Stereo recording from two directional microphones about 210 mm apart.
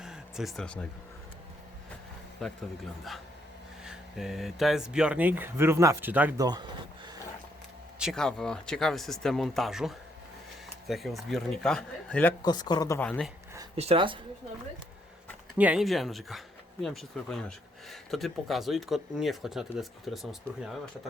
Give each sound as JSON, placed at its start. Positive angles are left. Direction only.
{"t": 0.0, "sound": "vehicle", "side_deg": 0}
{"t": 2.4, "sound": "speech", "side_deg": 0}
{"t": 7.9, "sound": "speech", "side_deg": 0}
{"t": 12.4, "sound": "speech", "side_deg": 20}
{"t": 13.7, "sound": "speech", "side_deg": -25}
{"t": 15.5, "sound": "speech", "side_deg": -5}